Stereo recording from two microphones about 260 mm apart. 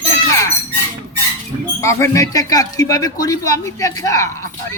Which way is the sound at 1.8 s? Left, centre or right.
Centre.